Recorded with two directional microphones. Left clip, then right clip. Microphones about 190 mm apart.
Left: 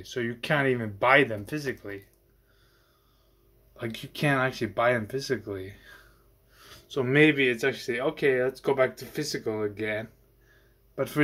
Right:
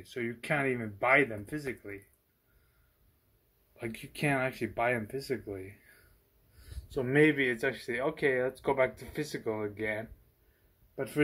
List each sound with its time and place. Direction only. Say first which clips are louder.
0.0 s speech: left 5 dB; 15° left (ahead or behind)
3.8 s speech: left 5 dB; 90° left
5.3 s speech: left 5 dB; 10° left (ahead or behind)
6.9 s speech: left 5 dB; 10° left (ahead or behind)